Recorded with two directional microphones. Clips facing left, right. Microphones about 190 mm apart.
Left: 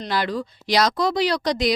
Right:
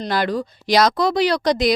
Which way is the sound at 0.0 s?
45° right (ahead or behind).